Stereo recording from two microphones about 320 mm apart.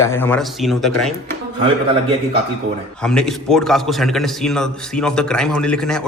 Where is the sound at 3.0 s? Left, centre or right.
Centre.